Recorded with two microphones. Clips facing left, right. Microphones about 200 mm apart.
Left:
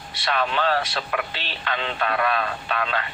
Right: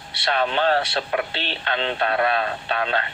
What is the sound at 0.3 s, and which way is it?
Speech, 30° right (ahead or behind).